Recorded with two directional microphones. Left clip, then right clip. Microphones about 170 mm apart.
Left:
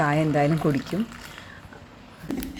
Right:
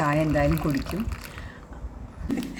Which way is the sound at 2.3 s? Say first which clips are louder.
Right 2 dB; centre (ahead or behind).